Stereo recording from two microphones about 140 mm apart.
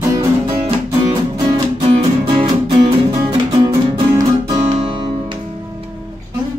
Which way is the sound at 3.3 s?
30° right (ahead or behind).